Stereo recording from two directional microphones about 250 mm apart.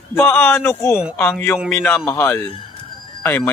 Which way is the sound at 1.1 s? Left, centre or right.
Centre.